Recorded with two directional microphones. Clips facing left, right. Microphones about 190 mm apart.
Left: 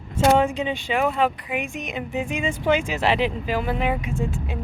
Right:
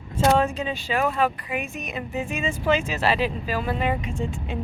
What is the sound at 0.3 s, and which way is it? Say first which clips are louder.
Speech: left 2 dB; 15° left (ahead or behind).